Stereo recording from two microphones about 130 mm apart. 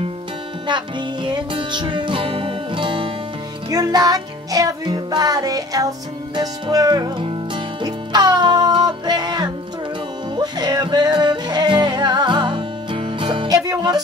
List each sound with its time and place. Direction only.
0.7 s music: 35° right (ahead or behind)
3.7 s music: 30° right (ahead or behind)
7.2 s music: 40° right (ahead or behind)
13.5 s speech: 30° right (ahead or behind)